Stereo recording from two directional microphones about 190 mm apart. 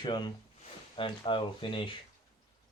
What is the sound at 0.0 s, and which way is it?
Speech, 25° left (ahead or behind).